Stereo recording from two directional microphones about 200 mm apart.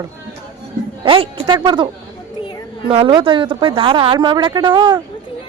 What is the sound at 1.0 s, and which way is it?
A woman's voice, 25° right (ahead or behind).